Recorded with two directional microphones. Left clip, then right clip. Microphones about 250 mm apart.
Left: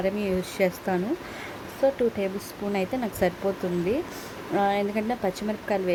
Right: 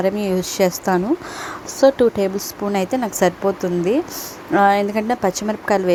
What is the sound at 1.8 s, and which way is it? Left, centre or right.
A woman's voice, centre.